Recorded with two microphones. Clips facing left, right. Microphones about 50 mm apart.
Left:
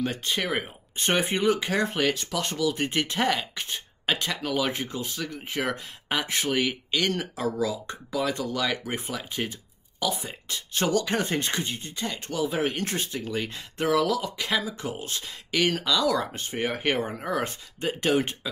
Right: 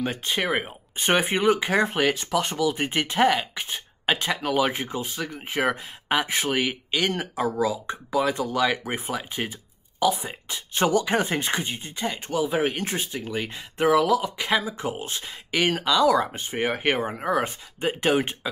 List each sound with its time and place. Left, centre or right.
0.0 s speech: centre